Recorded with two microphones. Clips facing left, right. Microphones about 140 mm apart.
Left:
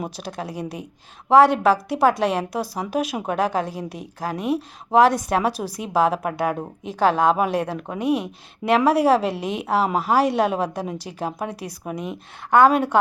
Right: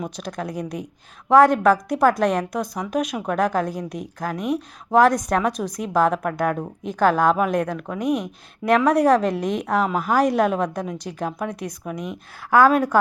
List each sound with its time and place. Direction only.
0.2 s a woman's voice: 5° left (ahead or behind)
2.6 s speech: 30° left (ahead or behind)
2.9 s a woman's voice: 5° left (ahead or behind)
9.8 s speech: 30° left (ahead or behind)
10.1 s a woman's voice: centre (ahead or behind)